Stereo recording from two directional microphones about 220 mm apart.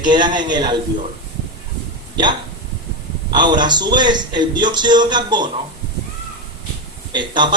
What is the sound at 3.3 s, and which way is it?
A man's voice, 20° right (ahead or behind).